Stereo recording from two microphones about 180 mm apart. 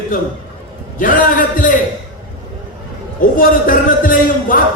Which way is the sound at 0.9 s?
50° left (ahead or behind).